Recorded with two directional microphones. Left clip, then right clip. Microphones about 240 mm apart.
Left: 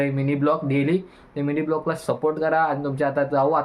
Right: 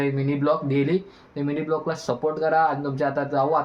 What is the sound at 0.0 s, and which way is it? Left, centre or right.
Speech, centre.